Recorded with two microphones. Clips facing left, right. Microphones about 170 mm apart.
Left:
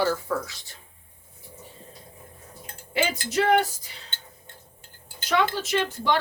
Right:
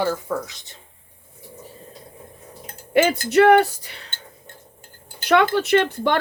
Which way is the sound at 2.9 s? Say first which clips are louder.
Right 9 dB; 55° right (ahead or behind).